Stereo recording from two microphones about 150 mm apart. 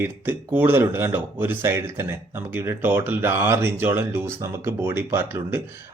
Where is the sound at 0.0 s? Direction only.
15° right (ahead or behind).